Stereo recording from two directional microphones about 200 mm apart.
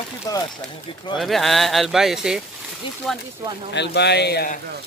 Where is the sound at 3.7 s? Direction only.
60° left (ahead or behind).